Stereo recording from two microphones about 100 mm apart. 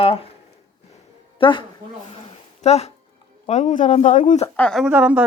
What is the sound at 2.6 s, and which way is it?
Speech, 90° left.